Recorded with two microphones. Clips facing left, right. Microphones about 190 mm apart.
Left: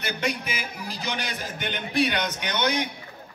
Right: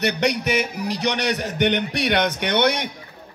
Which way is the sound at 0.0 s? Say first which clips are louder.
Right 8 dB; 75° right (ahead or behind).